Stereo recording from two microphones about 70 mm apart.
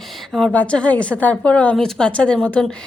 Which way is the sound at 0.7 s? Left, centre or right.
Centre.